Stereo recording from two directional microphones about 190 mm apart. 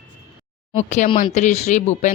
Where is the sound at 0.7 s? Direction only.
35° left (ahead or behind).